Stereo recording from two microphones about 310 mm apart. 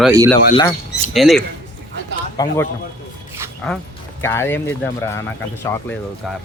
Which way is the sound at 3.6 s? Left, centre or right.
Centre.